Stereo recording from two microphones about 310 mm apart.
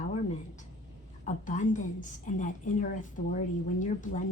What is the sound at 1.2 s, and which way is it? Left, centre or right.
A woman's voice, left.